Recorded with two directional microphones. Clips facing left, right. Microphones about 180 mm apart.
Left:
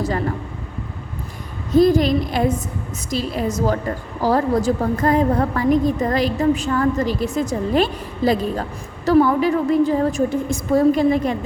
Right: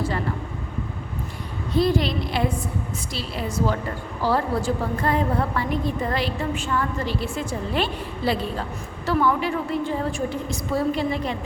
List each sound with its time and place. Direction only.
1.7 s a woman's voice: 45° left (ahead or behind)